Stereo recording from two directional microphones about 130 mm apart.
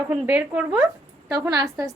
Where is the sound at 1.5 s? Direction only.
30° right (ahead or behind).